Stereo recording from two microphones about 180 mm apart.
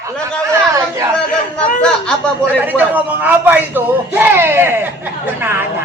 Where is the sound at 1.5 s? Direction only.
5° left (ahead or behind).